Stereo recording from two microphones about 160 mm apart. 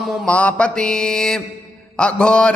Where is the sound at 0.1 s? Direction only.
10° left (ahead or behind).